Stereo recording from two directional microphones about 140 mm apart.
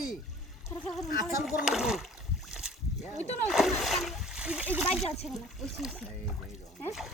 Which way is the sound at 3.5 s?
Centre (ahead or behind).